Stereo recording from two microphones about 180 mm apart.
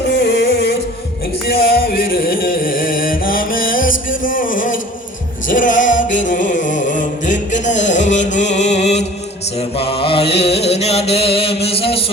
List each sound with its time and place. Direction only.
0.1 s music: 70° left (ahead or behind); by 6.1 s 45° left (ahead or behind)
6.1 s a sound: 45° left (ahead or behind)
9.7 s mantra: 30° left (ahead or behind)